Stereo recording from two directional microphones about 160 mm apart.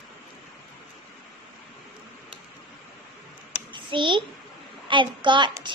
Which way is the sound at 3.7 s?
30° right (ahead or behind).